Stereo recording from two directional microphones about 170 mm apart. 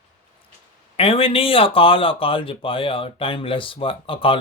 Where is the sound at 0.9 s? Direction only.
35° left (ahead or behind).